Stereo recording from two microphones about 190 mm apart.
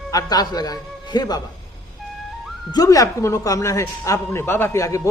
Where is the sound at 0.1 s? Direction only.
20° left (ahead or behind).